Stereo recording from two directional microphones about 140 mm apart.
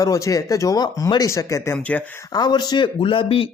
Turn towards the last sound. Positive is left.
turn(degrees=40)  # may be behind; listen again after turning